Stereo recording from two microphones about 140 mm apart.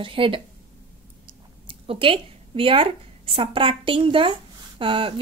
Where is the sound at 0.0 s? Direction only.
40° right (ahead or behind).